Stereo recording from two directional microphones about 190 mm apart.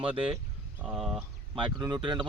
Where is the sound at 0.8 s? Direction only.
5° right (ahead or behind).